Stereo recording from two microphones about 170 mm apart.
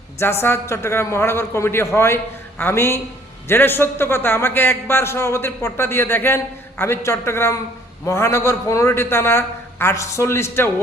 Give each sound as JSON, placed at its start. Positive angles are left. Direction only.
{"t": 0.4, "sound": "a man's voice", "side_deg": 15}